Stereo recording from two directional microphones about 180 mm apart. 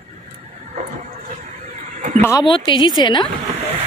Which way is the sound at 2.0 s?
40° right (ahead or behind).